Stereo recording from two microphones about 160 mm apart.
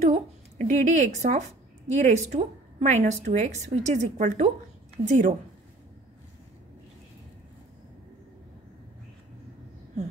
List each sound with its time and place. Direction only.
0.0 s a woman's voice: 50° right (ahead or behind)